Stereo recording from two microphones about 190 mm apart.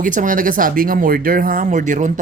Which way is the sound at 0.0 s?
45° right (ahead or behind).